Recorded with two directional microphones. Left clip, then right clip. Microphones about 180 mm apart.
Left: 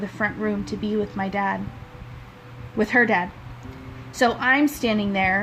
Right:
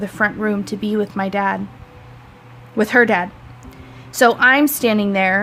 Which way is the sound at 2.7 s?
40° right (ahead or behind).